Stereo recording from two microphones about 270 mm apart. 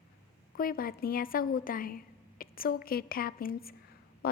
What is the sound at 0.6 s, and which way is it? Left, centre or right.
A woman's voice, left.